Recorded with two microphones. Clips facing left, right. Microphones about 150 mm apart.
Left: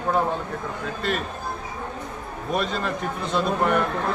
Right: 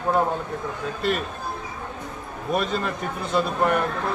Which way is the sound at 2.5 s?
Centre (ahead or behind).